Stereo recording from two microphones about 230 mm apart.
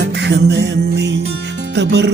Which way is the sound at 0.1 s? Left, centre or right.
Right.